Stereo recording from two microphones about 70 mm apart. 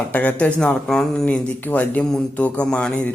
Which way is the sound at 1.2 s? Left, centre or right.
Left.